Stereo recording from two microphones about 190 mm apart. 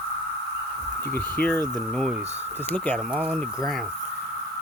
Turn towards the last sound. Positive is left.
turn(degrees=-5)  # may be behind; listen again after turning